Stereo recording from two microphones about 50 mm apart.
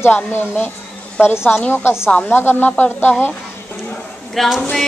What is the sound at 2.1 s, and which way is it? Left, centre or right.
Speech, left.